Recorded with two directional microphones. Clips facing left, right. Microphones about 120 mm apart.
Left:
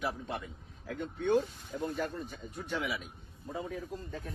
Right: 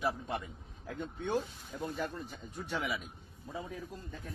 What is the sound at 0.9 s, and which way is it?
Speech, centre (ahead or behind).